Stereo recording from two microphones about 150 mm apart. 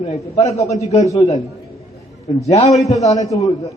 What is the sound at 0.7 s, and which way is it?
Speech, 45° left (ahead or behind).